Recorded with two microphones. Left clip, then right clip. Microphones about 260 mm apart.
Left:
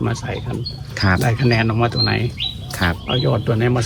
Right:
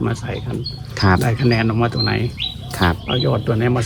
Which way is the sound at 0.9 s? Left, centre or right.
Centre.